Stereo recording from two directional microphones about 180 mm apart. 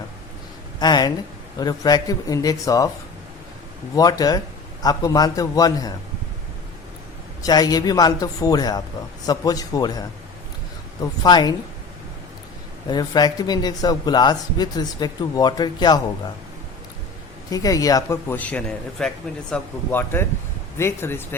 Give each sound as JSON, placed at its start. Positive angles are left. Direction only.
{"t": 0.8, "sound": "speech", "side_deg": 25}
{"t": 3.9, "sound": "speech", "side_deg": 20}
{"t": 7.4, "sound": "speech", "side_deg": 20}
{"t": 11.0, "sound": "speech", "side_deg": 20}
{"t": 12.9, "sound": "speech", "side_deg": 25}
{"t": 17.5, "sound": "a man's voice", "side_deg": 20}